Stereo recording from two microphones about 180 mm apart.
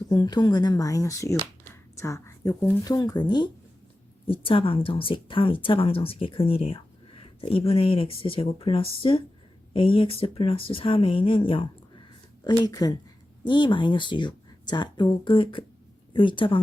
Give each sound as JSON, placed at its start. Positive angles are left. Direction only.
{"t": 0.1, "sound": "speech", "side_deg": 25}